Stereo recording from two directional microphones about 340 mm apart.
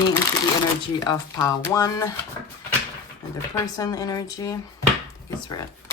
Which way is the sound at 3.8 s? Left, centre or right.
Centre.